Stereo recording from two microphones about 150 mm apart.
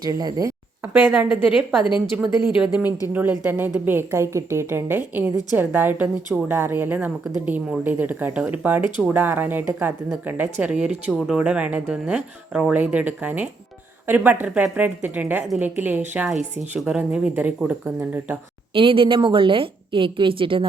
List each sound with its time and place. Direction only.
0.0 s a woman's voice: 25° right (ahead or behind)
0.8 s speech: 10° right (ahead or behind)
2.6 s speech: 5° right (ahead or behind)
16.3 s speech: 50° right (ahead or behind)
16.7 s speech: 10° right (ahead or behind)
18.7 s a woman's voice: 35° right (ahead or behind)